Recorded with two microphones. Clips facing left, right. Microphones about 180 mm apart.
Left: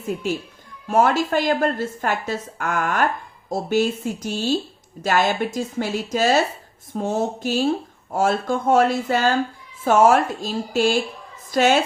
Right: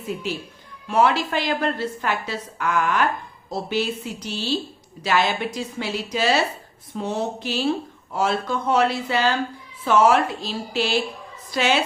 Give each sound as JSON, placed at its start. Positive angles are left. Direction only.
{"t": 0.1, "sound": "a woman's voice", "side_deg": 45}